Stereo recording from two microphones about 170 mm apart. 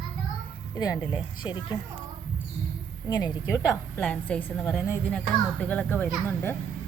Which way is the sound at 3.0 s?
25° left (ahead or behind).